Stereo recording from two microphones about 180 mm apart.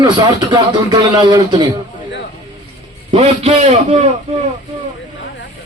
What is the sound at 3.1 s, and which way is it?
Speech, 35° right (ahead or behind).